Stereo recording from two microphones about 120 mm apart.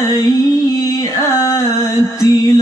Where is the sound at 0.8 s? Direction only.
30° left (ahead or behind).